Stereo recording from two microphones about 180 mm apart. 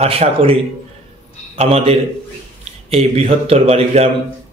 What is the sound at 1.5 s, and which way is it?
A man's voice, 35° right (ahead or behind).